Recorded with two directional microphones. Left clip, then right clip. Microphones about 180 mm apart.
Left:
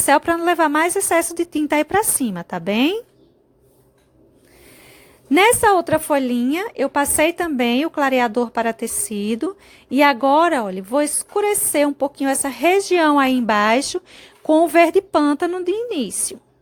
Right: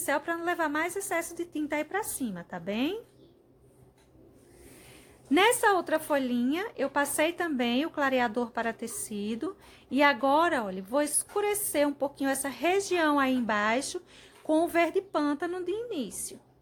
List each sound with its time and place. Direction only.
0.0 s a woman's voice: 50° left (ahead or behind)
5.3 s a woman's voice: 35° left (ahead or behind)